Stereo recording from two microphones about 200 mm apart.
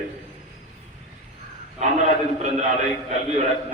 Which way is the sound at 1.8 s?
35° right (ahead or behind).